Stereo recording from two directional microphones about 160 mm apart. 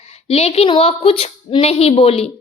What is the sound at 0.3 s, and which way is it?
A woman's voice, 40° left (ahead or behind).